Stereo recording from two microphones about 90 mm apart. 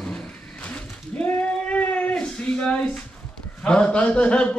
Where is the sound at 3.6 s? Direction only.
10° left (ahead or behind).